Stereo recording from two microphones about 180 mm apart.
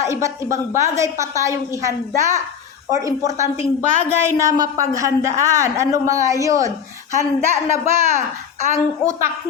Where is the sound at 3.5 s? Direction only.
40° left (ahead or behind).